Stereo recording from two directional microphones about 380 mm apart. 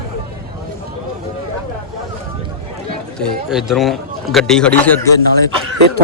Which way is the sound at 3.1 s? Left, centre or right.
Centre.